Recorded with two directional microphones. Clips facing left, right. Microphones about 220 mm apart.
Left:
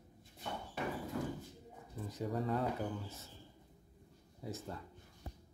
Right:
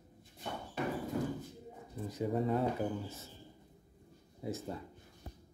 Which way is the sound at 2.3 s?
25° right (ahead or behind).